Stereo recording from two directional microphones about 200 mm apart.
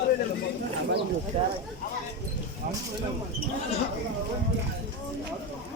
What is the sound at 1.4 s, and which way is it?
Speech, 35° right (ahead or behind).